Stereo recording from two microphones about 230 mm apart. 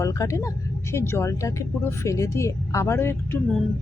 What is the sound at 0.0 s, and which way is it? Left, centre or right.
A woman's voice, centre.